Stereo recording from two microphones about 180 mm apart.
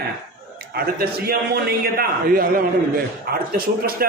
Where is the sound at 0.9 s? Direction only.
55° right (ahead or behind).